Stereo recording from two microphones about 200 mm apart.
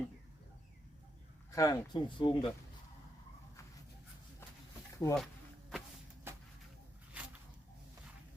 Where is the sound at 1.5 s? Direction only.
15° left (ahead or behind).